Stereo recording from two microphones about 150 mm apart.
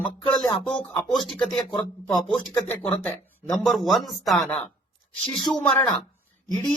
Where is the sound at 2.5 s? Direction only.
15° left (ahead or behind).